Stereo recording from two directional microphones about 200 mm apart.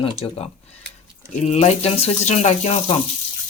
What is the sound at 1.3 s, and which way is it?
Speech, 35° left (ahead or behind).